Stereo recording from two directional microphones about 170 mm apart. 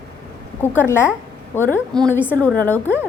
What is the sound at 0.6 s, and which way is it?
A woman's voice, 15° left (ahead or behind).